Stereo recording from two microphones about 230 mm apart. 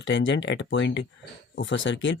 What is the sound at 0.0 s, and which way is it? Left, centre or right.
Speech, left.